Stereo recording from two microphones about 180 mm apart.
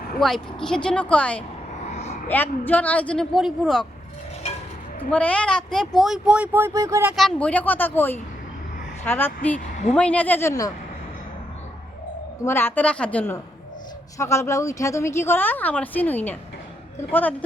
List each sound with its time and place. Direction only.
0.2 s speech: centre (ahead or behind)
2.0 s a sound: 35° left (ahead or behind)
2.3 s a woman's voice: 10° left (ahead or behind)
5.1 s speech: 5° left (ahead or behind); by 7.2 s 15° right (ahead or behind)
7.2 s a woman's voice: 5° left (ahead or behind)
12.5 s a woman's voice: 10° left (ahead or behind)